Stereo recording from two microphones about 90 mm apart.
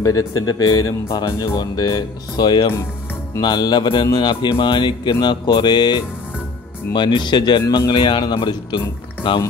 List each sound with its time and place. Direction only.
0.0 s speech: 40° left (ahead or behind)
1.1 s a man's voice: 55° left (ahead or behind)